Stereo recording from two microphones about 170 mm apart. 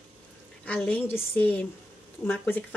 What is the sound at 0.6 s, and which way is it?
Speech, 10° left (ahead or behind).